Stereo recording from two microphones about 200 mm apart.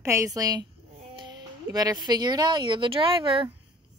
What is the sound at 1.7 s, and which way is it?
Speech, 20° right (ahead or behind).